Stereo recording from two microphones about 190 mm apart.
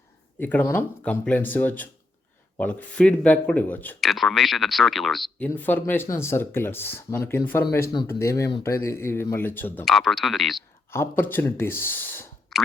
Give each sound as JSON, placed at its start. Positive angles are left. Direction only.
{"t": 0.3, "sound": "speech", "side_deg": 10}
{"t": 10.9, "sound": "speech", "side_deg": 10}
{"t": 12.5, "sound": "a sound", "side_deg": 0}